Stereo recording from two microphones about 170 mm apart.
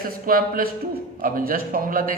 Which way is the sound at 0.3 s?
60° right (ahead or behind).